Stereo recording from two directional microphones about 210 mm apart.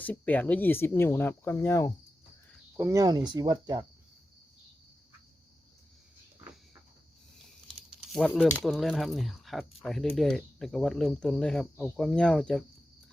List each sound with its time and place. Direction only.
0.0 s speech: 5° left (ahead or behind)
2.7 s speech: 15° right (ahead or behind)
7.3 s speech: centre (ahead or behind)